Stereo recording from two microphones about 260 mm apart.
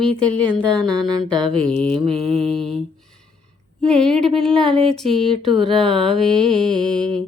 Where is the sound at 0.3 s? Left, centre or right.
Centre.